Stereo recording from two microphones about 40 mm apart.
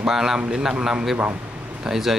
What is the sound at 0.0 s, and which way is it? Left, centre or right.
Speech, centre.